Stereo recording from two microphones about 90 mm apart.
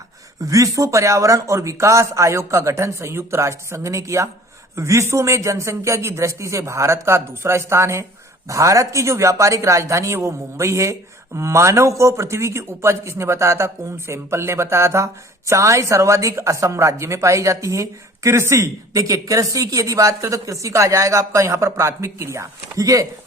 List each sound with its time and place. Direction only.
0.4 s speech: 40° right (ahead or behind)